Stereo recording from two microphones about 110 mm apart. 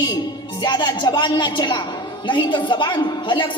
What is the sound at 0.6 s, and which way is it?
A woman's voice, 45° left (ahead or behind).